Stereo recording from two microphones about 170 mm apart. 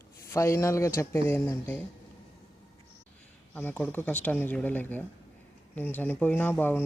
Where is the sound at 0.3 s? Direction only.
15° left (ahead or behind).